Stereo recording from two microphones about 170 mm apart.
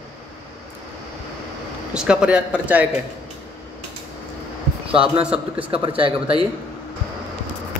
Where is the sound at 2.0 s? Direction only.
5° right (ahead or behind).